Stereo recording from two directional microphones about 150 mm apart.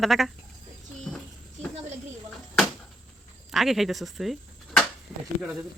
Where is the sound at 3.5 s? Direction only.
Centre (ahead or behind).